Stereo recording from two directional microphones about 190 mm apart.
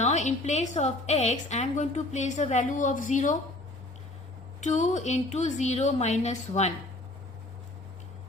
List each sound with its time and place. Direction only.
0.0 s a woman's voice: 35° left (ahead or behind)
4.6 s a woman's voice: 40° left (ahead or behind)